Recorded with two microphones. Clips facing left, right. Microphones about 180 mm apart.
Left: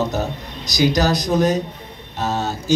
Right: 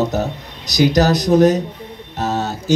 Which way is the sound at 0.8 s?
65° right (ahead or behind).